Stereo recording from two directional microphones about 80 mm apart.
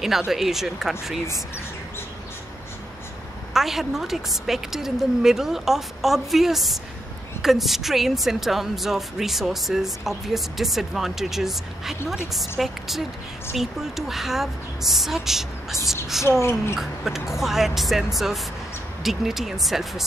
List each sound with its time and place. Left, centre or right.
0.0 s a woman's voice: centre
3.5 s a woman's voice: centre
16.3 s speech: left
16.7 s a woman's voice: centre